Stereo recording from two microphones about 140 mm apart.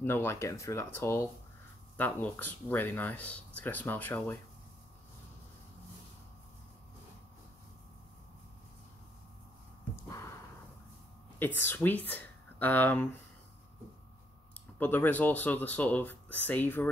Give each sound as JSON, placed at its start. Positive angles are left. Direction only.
{"t": 0.0, "sound": "speech", "side_deg": 15}
{"t": 10.0, "sound": "a sound", "side_deg": 20}
{"t": 11.3, "sound": "speech", "side_deg": 15}
{"t": 14.8, "sound": "speech", "side_deg": 15}